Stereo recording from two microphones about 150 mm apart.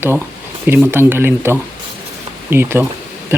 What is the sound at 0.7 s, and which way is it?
Speech, 15° right (ahead or behind).